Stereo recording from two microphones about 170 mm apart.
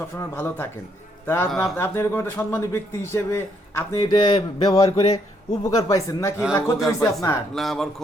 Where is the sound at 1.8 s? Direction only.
15° left (ahead or behind).